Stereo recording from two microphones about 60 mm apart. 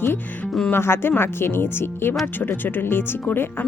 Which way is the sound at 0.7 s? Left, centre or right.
Left.